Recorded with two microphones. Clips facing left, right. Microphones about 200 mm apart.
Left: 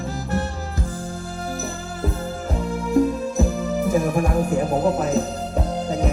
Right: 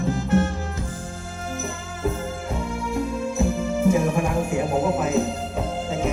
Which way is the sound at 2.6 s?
40° left (ahead or behind).